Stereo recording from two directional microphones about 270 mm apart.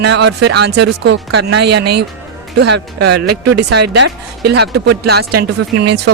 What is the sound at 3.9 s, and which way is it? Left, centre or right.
Speech, right.